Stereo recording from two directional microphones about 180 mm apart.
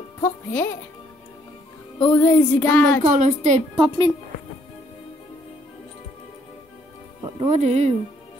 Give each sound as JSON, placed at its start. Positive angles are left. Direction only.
{"t": 0.2, "sound": "speech", "side_deg": 10}
{"t": 2.0, "sound": "music", "side_deg": 10}
{"t": 3.0, "sound": "a woman's voice", "side_deg": -45}
{"t": 3.7, "sound": "a woman's voice", "side_deg": -25}
{"t": 7.3, "sound": "speech", "side_deg": -35}